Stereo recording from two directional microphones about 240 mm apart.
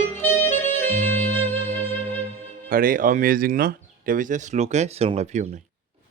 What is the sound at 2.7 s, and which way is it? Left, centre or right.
Speech, right.